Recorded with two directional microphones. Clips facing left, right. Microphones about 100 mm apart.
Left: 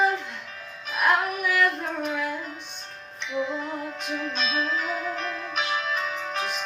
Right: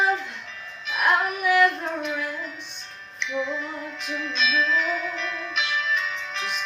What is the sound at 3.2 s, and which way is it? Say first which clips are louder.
Music: even; 40° left (ahead or behind).